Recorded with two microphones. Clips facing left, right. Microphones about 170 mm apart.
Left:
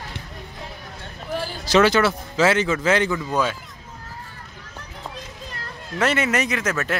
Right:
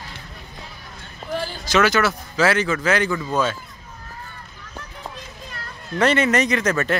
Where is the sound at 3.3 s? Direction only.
15° left (ahead or behind).